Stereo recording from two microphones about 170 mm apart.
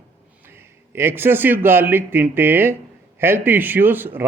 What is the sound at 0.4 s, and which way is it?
A man's voice, 15° right (ahead or behind).